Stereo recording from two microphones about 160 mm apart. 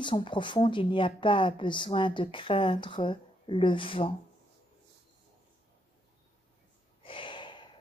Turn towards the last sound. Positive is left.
turn(degrees=30)  # may be behind; listen again after turning